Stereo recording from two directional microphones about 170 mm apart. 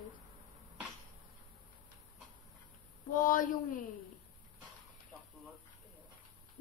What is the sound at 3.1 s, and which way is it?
Speech, 50° left (ahead or behind).